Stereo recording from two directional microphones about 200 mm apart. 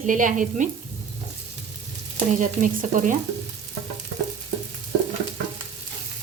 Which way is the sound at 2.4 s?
40° right (ahead or behind).